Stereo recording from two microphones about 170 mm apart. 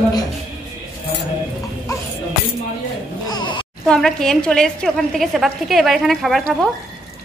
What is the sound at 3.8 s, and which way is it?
A woman's voice, 5° left (ahead or behind).